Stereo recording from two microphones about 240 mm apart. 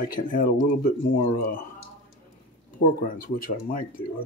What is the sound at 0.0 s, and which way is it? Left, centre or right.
Speech, left.